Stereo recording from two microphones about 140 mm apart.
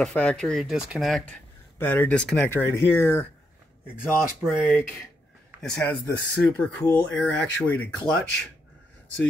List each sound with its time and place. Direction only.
0.0 s speech: 10° left (ahead or behind)
1.8 s speech: 15° left (ahead or behind)
2.5 s speech: 15° left (ahead or behind)
4.0 s speech: 5° right (ahead or behind)
5.6 s speech: 5° left (ahead or behind)